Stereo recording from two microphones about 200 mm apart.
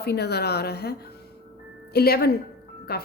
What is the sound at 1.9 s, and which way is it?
Speech, 50° left (ahead or behind).